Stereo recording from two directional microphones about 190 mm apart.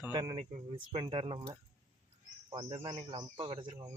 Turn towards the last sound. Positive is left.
turn(degrees=-25)  # may be behind; listen again after turning